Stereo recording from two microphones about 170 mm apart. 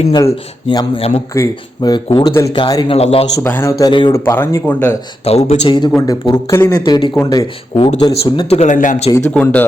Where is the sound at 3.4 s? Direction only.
15° left (ahead or behind).